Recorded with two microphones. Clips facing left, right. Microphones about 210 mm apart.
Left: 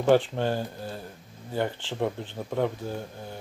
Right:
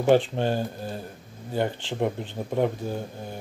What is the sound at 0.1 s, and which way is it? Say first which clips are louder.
Speech: right 1 dB; 20° right (ahead or behind).